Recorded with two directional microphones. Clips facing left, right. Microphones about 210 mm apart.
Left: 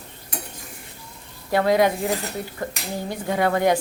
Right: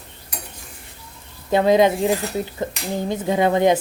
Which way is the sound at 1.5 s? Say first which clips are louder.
Right 3 dB; 20° right (ahead or behind).